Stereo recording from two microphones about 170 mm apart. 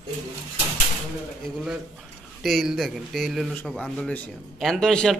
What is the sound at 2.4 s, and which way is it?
Speech, centre (ahead or behind).